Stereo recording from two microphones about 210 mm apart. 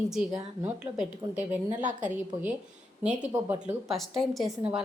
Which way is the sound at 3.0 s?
5° right (ahead or behind).